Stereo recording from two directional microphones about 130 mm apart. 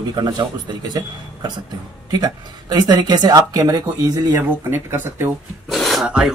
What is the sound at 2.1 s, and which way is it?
Speech, 30° right (ahead or behind).